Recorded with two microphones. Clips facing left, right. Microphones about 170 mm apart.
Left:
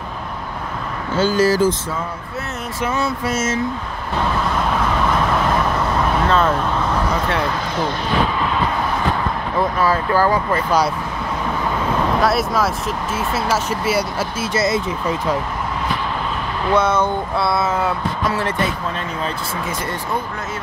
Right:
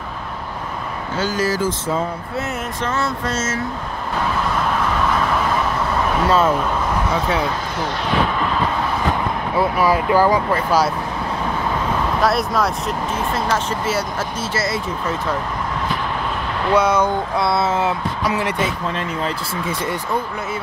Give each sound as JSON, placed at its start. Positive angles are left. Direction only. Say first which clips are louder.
{"t": 1.1, "sound": "speech", "louder": "left 5 dB", "side_deg": 30}
{"t": 2.8, "sound": "speech", "louder": "left 3 dB", "side_deg": 10}
{"t": 6.2, "sound": "speech", "louder": "right 2 dB", "side_deg": -5}
{"t": 9.6, "sound": "speech", "louder": "right 1 dB", "side_deg": -10}
{"t": 10.5, "sound": "speech", "louder": "even", "side_deg": 0}
{"t": 12.2, "sound": "speech", "louder": "right 1 dB", "side_deg": 0}
{"t": 16.7, "sound": "speech", "louder": "right 1 dB", "side_deg": -10}
{"t": 17.5, "sound": "speech", "louder": "right 1 dB", "side_deg": -25}